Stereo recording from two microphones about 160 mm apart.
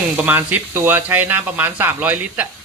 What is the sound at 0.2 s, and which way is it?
Speech, 10° right (ahead or behind).